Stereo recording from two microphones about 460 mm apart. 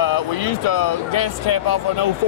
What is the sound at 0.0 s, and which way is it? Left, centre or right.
Speech, left.